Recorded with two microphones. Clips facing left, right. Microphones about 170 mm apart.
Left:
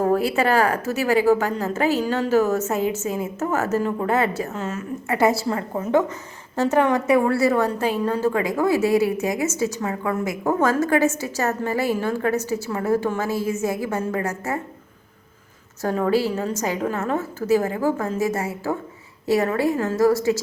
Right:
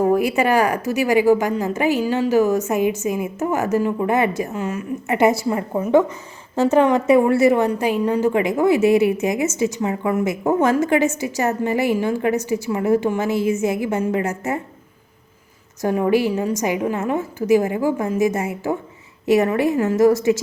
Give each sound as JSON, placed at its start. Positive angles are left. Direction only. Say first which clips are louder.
{"t": 0.0, "sound": "a woman's voice", "louder": "right 2 dB", "side_deg": -15}
{"t": 15.8, "sound": "a woman's voice", "louder": "right 3 dB", "side_deg": -15}